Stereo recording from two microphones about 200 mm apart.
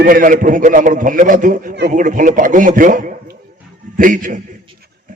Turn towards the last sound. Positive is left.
turn(degrees=-40)  # may be behind; listen again after turning